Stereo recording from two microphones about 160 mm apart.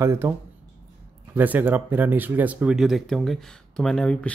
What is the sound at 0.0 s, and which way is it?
Speech, 15° right (ahead or behind).